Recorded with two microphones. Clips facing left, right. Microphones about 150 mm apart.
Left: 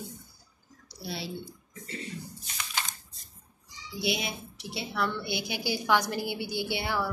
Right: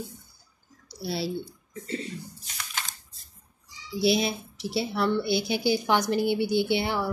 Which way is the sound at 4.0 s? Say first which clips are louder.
Right 8 dB; 35° right (ahead or behind).